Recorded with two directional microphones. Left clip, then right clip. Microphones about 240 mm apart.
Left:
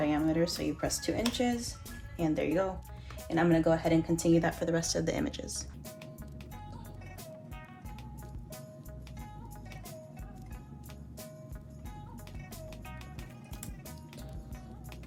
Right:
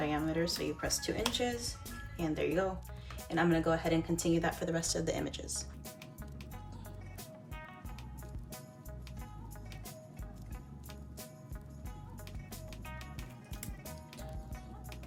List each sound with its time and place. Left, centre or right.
0.0 s speech: left